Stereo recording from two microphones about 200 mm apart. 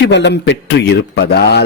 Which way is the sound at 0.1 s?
60° left (ahead or behind).